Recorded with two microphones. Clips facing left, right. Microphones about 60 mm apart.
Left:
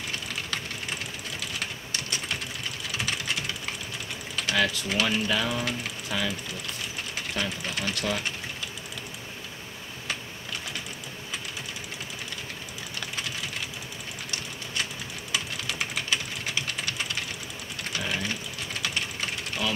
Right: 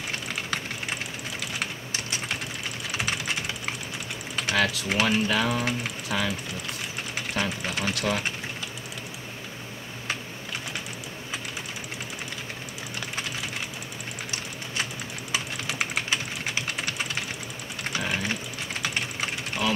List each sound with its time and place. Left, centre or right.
3.0 s typing: right
4.4 s speech: right
15.3 s typing: right